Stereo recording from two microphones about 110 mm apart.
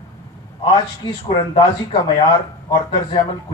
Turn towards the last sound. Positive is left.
turn(degrees=40)  # may be behind; listen again after turning